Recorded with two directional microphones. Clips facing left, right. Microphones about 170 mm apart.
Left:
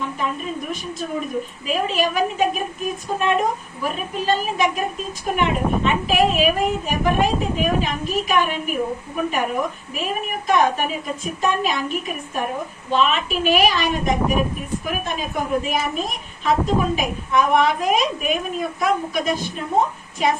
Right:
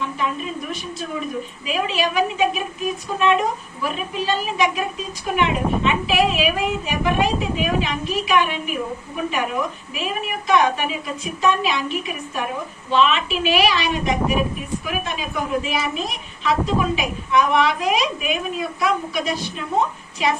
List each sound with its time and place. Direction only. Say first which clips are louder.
1.6 s a woman's voice: left 1 dB; 45° left (ahead or behind)
9.9 s a woman's voice: left 1 dB; 45° left (ahead or behind)